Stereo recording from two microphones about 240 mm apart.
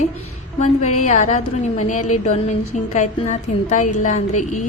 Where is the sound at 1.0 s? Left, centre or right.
Left.